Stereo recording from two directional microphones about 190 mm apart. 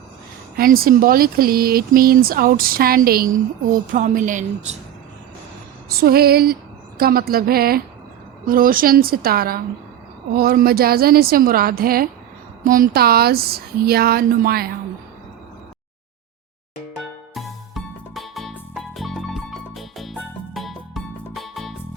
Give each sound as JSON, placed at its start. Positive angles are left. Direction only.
{"t": 0.5, "sound": "a woman's voice", "side_deg": -50}
{"t": 5.9, "sound": "speech", "side_deg": -55}
{"t": 17.3, "sound": "music", "side_deg": 0}